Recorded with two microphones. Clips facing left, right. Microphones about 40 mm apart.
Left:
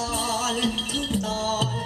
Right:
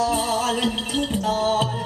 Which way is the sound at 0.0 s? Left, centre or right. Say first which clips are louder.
Right 5 dB; centre.